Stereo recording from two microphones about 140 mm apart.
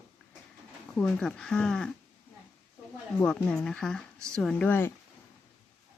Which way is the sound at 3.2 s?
5° left (ahead or behind).